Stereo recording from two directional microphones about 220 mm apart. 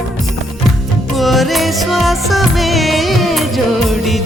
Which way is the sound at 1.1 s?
Centre (ahead or behind).